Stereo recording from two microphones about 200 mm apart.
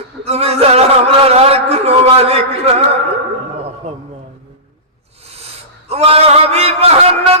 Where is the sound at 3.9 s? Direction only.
30° right (ahead or behind).